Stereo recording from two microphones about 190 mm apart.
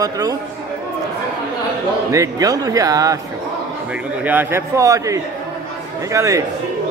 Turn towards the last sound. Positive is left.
turn(degrees=-15)  # may be behind; listen again after turning